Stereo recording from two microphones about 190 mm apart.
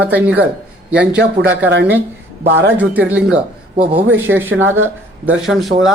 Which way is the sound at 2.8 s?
10° right (ahead or behind).